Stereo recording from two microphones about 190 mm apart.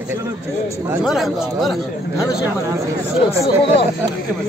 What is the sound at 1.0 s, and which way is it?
Speech, centre (ahead or behind).